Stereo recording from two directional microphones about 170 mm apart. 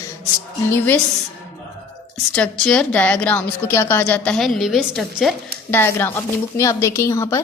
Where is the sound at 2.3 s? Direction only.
5° left (ahead or behind).